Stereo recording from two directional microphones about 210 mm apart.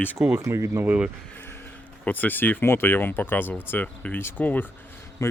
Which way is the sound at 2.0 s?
10° left (ahead or behind).